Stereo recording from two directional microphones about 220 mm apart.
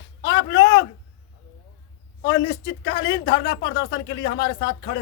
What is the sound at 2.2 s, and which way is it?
A man's voice, 55° left (ahead or behind).